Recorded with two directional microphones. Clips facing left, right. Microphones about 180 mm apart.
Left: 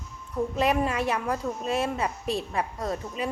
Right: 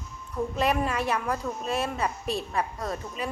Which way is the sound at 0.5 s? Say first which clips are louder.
Left 1 dB; 20° left (ahead or behind).